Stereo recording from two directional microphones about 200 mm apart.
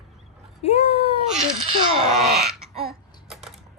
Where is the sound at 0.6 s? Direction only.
30° left (ahead or behind).